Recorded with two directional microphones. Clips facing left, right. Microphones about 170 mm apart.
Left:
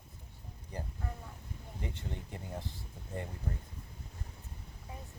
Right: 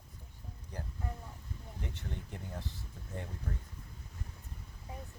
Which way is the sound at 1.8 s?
10° left (ahead or behind).